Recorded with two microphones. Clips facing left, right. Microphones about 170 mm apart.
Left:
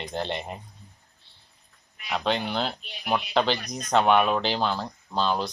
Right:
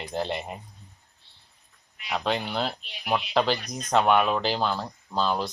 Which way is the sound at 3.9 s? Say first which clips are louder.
Left 1 dB; centre (ahead or behind).